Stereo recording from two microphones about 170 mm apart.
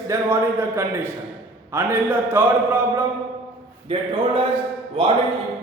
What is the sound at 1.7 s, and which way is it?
Speech, 15° right (ahead or behind).